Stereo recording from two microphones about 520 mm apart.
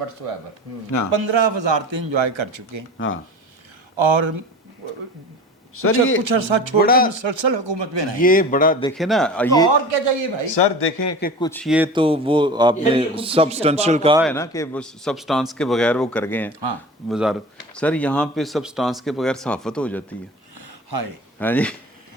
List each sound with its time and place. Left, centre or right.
0.9 s a man's voice: left
1.1 s speech: right
3.9 s speech: right
5.7 s a man's voice: left
6.2 s speech: right
6.7 s a man's voice: centre
7.1 s speech: right
8.2 s a man's voice: centre
9.0 s speech: centre
10.4 s speech: left
11.2 s a man's voice: centre
14.3 s speech: centre
20.6 s a sound: right
21.3 s speech: centre